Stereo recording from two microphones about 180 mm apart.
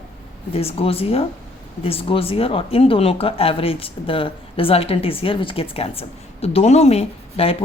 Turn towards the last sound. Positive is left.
turn(degrees=35)  # may be behind; listen again after turning